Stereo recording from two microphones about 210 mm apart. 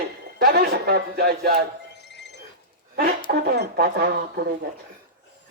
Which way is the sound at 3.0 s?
50° right (ahead or behind).